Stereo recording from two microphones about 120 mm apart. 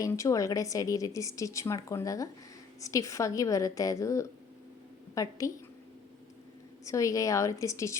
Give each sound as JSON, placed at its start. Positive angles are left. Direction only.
{"t": 0.0, "sound": "speech", "side_deg": 25}
{"t": 6.8, "sound": "speech", "side_deg": 25}